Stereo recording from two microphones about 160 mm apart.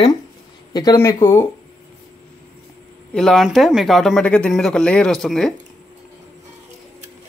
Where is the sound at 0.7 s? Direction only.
20° left (ahead or behind).